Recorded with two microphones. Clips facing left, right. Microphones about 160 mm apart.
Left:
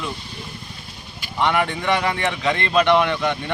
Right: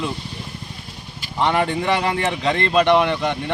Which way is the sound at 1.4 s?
35° right (ahead or behind).